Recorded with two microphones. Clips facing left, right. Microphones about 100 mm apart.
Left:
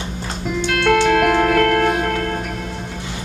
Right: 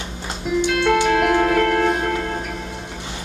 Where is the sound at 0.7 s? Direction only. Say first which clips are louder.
Left 3 dB; 60° left (ahead or behind).